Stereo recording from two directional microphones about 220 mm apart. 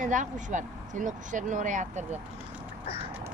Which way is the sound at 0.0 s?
35° right (ahead or behind).